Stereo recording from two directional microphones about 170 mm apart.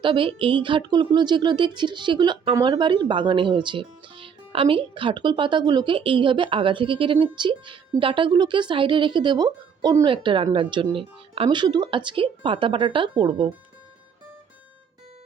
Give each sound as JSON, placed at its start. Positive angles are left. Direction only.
{"t": 0.0, "sound": "a woman's voice", "side_deg": -30}